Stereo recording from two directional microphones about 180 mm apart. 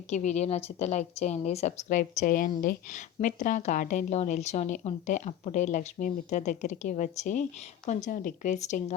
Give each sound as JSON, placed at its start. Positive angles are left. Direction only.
{"t": 0.1, "sound": "a woman's voice", "side_deg": 40}